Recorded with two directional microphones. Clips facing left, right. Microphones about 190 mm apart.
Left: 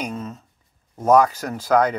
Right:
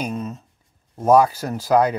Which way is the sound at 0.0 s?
15° right (ahead or behind).